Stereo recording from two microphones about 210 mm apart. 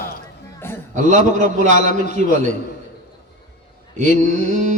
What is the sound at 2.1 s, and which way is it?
Speech, 45° left (ahead or behind).